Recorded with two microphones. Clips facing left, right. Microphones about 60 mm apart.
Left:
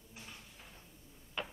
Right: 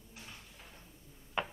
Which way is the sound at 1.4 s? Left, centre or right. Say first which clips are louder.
Right 5 dB; centre.